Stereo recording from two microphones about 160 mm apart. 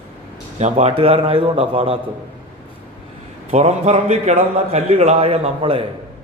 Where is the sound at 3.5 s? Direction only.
45° right (ahead or behind).